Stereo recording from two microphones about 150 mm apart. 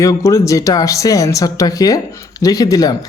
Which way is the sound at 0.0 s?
20° left (ahead or behind).